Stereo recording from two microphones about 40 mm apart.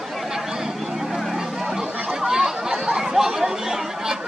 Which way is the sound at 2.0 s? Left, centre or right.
Centre.